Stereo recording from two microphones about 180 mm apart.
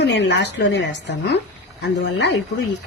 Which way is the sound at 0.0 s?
75° left (ahead or behind).